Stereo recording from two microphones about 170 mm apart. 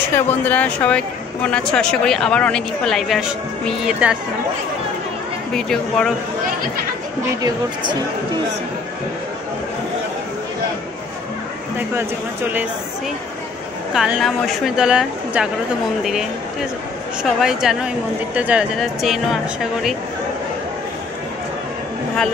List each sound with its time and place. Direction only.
0.3 s speech: 10° left (ahead or behind)
5.5 s speech: 5° left (ahead or behind)
7.4 s speech: 25° right (ahead or behind)
11.9 s speech: 10° right (ahead or behind)
13.9 s speech: centre (ahead or behind)